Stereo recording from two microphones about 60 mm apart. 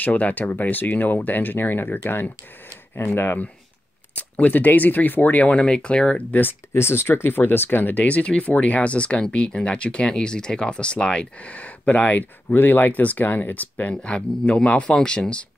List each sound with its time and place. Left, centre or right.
0.0 s speech: left
4.1 s speech: left
6.7 s speech: left; by 15.4 s centre